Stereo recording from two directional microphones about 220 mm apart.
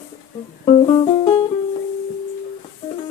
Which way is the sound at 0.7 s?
25° left (ahead or behind).